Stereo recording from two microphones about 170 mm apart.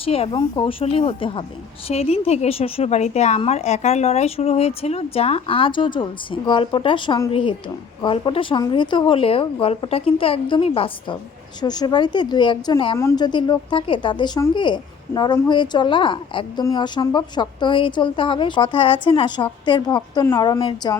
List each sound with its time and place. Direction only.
0.0 s a woman's voice: 35° left (ahead or behind)